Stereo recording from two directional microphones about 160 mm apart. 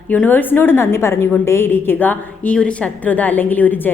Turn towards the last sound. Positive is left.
turn(degrees=10)  # may be behind; listen again after turning